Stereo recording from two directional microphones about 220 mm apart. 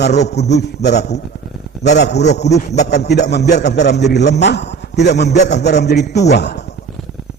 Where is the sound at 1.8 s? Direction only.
50° left (ahead or behind).